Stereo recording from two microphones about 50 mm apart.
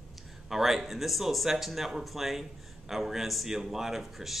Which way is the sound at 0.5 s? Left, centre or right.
Centre.